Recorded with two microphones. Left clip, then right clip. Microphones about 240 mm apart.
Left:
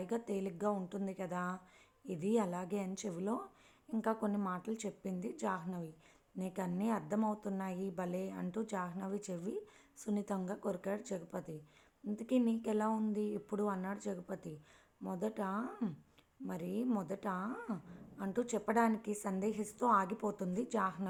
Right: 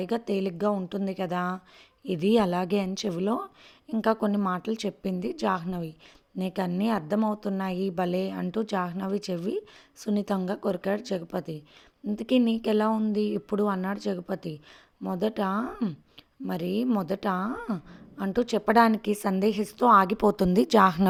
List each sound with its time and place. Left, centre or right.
0.0 s a woman's voice: right